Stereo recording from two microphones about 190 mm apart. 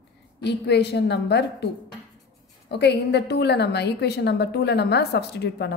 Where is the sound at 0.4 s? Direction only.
60° left (ahead or behind).